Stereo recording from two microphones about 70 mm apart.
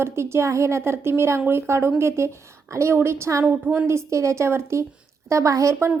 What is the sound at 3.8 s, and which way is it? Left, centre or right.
A woman's voice, right.